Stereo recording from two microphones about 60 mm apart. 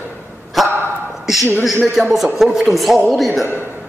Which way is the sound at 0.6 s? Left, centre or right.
Centre.